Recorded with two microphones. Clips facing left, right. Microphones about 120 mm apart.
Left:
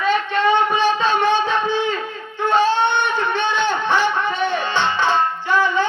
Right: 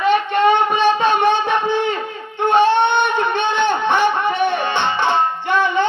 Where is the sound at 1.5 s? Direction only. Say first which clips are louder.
Right 2 dB; 20° right (ahead or behind).